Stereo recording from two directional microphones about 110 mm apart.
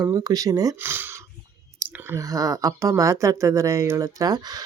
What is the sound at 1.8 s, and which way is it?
Speech, 30° right (ahead or behind).